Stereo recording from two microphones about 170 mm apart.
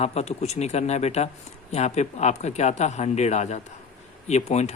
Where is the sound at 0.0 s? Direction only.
40° left (ahead or behind).